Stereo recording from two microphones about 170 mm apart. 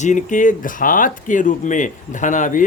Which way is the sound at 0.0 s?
50° left (ahead or behind).